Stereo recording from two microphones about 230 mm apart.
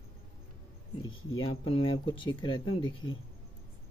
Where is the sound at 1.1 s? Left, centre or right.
Left.